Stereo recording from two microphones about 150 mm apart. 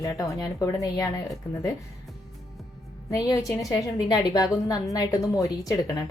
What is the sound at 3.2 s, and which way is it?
A woman's voice, 20° left (ahead or behind).